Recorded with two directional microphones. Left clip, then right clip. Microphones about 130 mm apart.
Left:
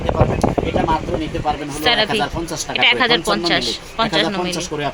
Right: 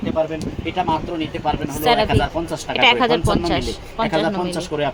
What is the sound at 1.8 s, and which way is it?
Speech, 25° right (ahead or behind).